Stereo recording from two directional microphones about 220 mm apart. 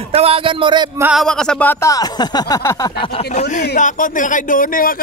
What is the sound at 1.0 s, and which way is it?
Speech, centre (ahead or behind).